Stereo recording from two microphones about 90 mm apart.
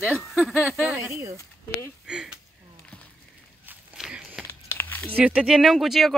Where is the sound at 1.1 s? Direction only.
35° right (ahead or behind).